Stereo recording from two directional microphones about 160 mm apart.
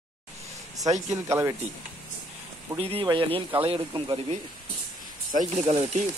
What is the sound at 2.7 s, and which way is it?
Speech, 30° right (ahead or behind).